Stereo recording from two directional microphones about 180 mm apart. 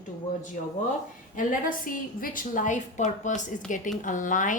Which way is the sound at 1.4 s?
50° left (ahead or behind).